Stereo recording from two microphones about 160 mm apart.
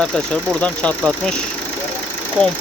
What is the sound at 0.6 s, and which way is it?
Speech, 5° left (ahead or behind).